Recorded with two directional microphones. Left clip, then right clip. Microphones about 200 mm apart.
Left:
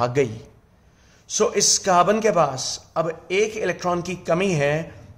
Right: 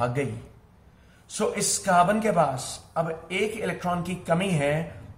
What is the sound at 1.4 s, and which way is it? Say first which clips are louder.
A man's voice: left 7 dB; 40° left (ahead or behind).